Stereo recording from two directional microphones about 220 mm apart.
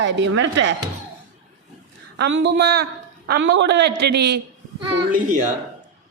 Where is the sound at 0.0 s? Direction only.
55° right (ahead or behind).